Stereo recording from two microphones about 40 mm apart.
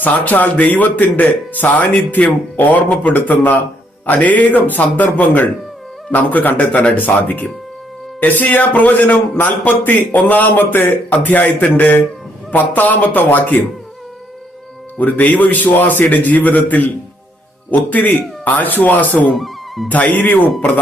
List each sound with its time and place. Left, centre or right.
0.0 s speech: left
3.2 s speech: left
4.0 s speech: left
14.9 s speech: left
19.3 s music: centre
19.9 s speech: left